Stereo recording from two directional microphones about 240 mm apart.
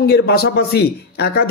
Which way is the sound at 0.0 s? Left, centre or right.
Left.